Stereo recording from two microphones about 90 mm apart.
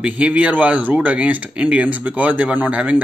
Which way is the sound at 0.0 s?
15° right (ahead or behind).